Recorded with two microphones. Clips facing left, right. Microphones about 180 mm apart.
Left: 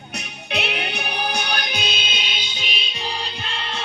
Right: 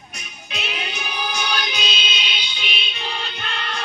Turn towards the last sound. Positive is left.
turn(degrees=30)  # may be behind; listen again after turning